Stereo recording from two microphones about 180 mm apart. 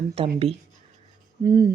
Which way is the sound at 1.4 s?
20° right (ahead or behind).